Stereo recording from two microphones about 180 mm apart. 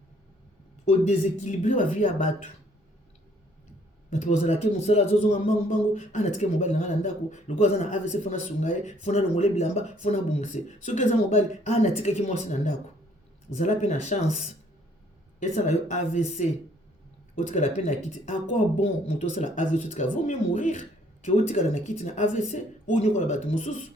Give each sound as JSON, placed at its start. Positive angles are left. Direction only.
{"t": 0.9, "sound": "speech", "side_deg": 40}
{"t": 4.1, "sound": "a man's voice", "side_deg": 40}
{"t": 15.4, "sound": "a man's voice", "side_deg": 40}